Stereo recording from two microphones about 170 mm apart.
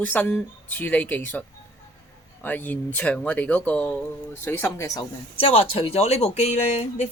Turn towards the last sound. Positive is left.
turn(degrees=40)  # may be behind; listen again after turning